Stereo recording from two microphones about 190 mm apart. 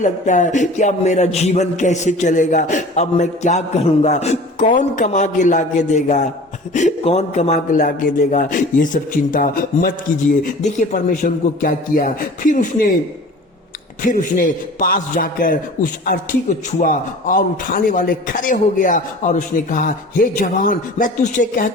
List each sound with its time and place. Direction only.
0.0 s a man's voice: 40° left (ahead or behind)
14.0 s a man's voice: 45° left (ahead or behind)